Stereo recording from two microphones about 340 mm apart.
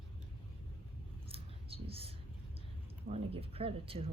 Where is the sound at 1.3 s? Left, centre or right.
Centre.